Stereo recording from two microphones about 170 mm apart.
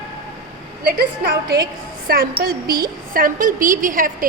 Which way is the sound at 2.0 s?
60° right (ahead or behind).